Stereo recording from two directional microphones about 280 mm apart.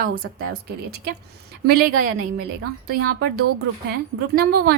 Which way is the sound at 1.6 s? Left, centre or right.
Right.